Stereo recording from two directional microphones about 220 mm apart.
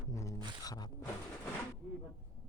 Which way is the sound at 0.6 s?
15° left (ahead or behind).